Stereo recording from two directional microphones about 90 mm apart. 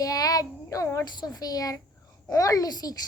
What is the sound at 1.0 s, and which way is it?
A woman's voice, 50° left (ahead or behind).